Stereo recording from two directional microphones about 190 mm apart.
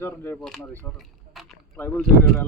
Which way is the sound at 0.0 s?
10° left (ahead or behind).